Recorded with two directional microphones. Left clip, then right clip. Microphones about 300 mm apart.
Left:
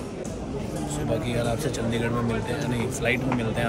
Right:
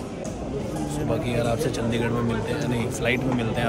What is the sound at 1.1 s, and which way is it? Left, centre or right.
Speech, centre.